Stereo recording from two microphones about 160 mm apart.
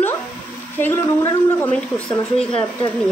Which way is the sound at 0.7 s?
15° left (ahead or behind).